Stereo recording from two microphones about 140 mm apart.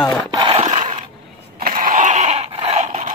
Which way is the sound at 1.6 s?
75° right (ahead or behind).